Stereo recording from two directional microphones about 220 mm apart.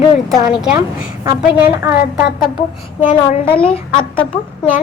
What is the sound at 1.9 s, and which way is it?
Speech, 40° left (ahead or behind).